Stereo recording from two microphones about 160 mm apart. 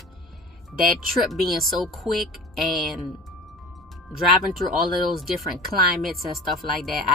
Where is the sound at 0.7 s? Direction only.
60° right (ahead or behind).